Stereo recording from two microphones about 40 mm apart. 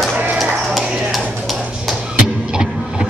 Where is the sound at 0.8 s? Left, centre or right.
Right.